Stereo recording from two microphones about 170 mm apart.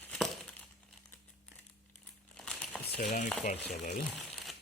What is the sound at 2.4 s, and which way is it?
Crumpling, 5° left (ahead or behind).